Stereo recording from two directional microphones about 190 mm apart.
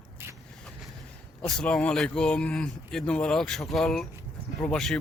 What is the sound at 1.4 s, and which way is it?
Speech, 5° left (ahead or behind).